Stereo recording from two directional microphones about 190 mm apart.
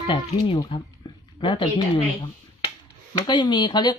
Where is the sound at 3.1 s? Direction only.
25° left (ahead or behind).